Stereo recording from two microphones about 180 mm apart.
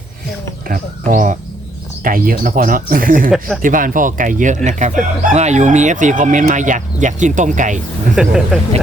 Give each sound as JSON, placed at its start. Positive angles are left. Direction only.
{"t": 0.7, "sound": "speech", "side_deg": -45}
{"t": 8.1, "sound": "speech", "side_deg": -5}